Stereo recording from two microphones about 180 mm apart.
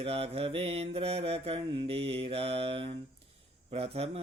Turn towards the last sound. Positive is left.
turn(degrees=-35)  # may be behind; listen again after turning